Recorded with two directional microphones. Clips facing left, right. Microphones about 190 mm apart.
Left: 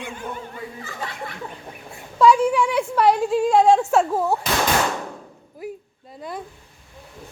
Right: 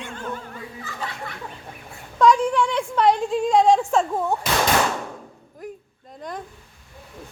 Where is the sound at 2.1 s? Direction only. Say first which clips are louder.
Left 1 dB; 5° left (ahead or behind).